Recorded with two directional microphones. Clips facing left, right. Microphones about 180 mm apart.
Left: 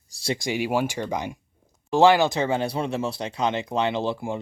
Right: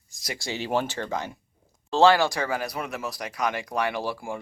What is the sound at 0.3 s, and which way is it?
Speech, 15° left (ahead or behind).